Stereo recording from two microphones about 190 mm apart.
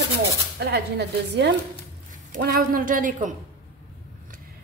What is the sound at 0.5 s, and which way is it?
A woman's voice, 60° right (ahead or behind).